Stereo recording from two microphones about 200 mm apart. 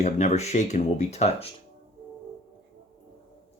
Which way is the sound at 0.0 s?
35° left (ahead or behind).